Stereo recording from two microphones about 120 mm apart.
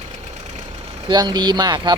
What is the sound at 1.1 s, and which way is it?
Speech, 35° right (ahead or behind).